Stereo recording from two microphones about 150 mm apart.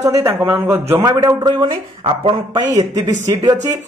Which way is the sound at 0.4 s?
15° right (ahead or behind).